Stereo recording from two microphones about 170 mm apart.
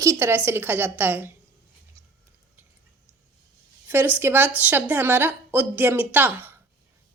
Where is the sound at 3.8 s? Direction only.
10° right (ahead or behind).